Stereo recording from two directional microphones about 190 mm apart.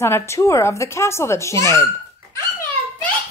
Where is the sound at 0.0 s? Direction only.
15° left (ahead or behind).